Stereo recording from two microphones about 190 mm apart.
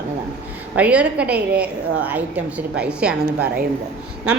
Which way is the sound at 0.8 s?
5° right (ahead or behind).